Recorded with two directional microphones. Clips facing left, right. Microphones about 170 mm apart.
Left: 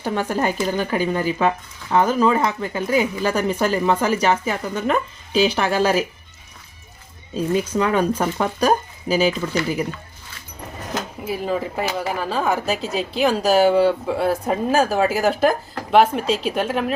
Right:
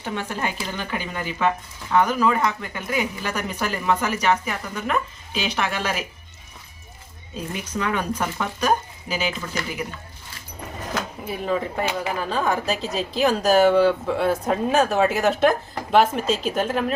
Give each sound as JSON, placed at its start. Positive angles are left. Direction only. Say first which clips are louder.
{"t": 0.0, "sound": "speech", "louder": "left 6 dB", "side_deg": 40}
{"t": 7.5, "sound": "speech", "louder": "left 7 dB", "side_deg": 35}
{"t": 11.3, "sound": "a woman's voice", "louder": "left 2 dB", "side_deg": 5}